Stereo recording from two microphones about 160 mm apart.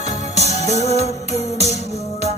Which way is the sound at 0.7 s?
45° left (ahead or behind).